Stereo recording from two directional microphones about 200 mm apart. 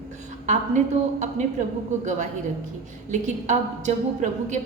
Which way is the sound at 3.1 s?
35° right (ahead or behind).